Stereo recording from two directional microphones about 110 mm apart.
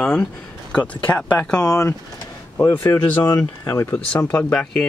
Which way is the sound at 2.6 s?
25° left (ahead or behind).